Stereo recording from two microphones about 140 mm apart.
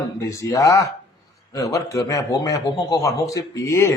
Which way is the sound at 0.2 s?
20° left (ahead or behind).